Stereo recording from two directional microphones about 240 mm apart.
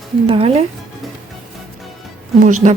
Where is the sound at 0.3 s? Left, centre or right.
Right.